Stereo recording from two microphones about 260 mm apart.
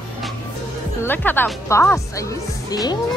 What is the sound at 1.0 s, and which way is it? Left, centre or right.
A woman's voice, centre.